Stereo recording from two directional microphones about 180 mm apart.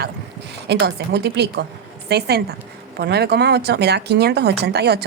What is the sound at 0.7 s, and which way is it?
A woman's voice, 65° right (ahead or behind).